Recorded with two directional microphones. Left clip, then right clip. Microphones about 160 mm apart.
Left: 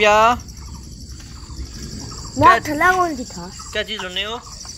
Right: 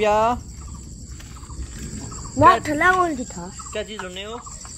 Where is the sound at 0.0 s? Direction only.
10° right (ahead or behind).